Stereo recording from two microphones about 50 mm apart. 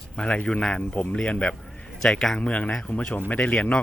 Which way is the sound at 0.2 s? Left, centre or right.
Left.